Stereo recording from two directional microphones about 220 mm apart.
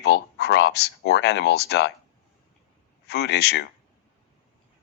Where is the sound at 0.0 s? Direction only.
50° left (ahead or behind).